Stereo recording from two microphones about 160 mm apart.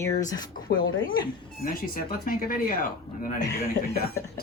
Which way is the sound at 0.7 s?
80° left.